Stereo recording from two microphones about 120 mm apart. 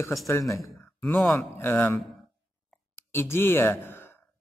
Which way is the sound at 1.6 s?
20° left (ahead or behind).